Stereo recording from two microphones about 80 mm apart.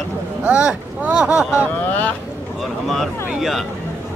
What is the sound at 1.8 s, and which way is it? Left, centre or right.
Speech, centre.